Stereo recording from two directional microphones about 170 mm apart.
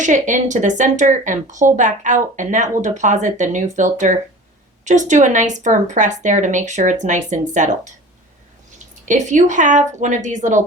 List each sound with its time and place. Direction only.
0.0 s speech: 45° right (ahead or behind)
9.0 s speech: 45° right (ahead or behind)